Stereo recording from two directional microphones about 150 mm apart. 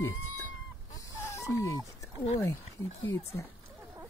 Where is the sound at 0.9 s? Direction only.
20° left (ahead or behind).